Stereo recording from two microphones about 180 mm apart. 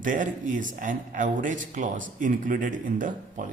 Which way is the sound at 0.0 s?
45° right (ahead or behind).